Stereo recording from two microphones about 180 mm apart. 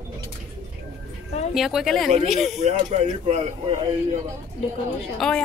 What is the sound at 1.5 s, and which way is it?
Speech, centre (ahead or behind).